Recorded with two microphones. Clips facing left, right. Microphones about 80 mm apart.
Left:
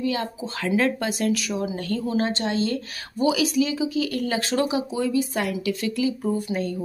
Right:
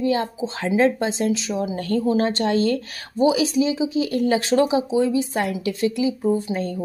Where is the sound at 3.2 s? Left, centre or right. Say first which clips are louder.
Right 3 dB; right.